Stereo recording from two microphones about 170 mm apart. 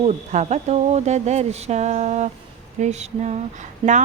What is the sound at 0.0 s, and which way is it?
Speech, 45° right (ahead or behind).